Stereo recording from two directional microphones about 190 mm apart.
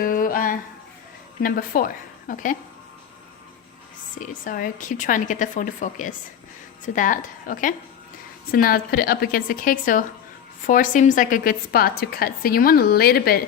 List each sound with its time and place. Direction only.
0.0 s a sound: 50° left (ahead or behind)
1.4 s a woman's voice: 50° left (ahead or behind)
4.2 s a woman's voice: 45° left (ahead or behind)